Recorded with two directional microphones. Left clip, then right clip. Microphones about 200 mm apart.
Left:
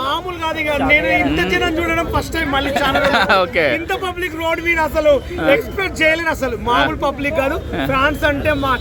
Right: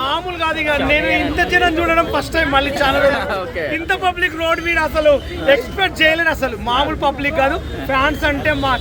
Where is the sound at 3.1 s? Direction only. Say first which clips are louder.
Left 6 dB; 45° left (ahead or behind).